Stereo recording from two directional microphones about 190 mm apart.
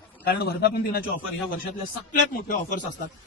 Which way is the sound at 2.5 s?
45° left (ahead or behind).